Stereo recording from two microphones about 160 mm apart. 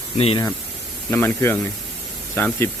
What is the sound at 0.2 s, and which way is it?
Speech, 35° left (ahead or behind).